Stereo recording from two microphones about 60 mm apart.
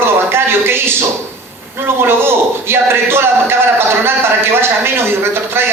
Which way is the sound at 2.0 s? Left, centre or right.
Right.